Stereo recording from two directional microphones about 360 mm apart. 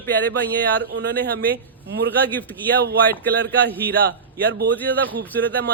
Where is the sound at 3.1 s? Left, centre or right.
Right.